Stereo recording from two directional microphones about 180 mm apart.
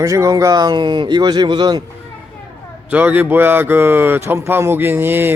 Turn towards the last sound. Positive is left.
turn(degrees=-10)  # may be behind; listen again after turning